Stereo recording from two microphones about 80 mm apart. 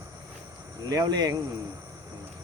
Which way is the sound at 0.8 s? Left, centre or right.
Right.